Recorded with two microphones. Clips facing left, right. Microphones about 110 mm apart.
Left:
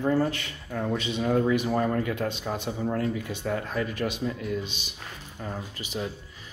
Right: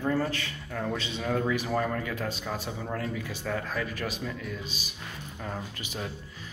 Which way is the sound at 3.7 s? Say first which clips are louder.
Left 4 dB; 30° left (ahead or behind).